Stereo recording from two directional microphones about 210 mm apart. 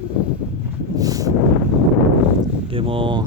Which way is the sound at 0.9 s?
15° right (ahead or behind).